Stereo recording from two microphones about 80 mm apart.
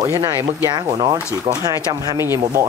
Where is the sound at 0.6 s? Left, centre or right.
Right.